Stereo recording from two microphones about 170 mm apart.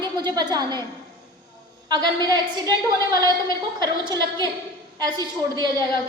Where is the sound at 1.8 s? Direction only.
25° right (ahead or behind).